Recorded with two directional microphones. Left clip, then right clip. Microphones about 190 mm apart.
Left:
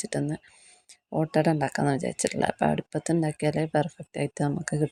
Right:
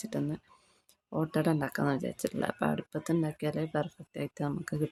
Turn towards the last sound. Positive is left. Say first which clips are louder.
# left 6 dB
turn(degrees=25)  # may be behind; listen again after turning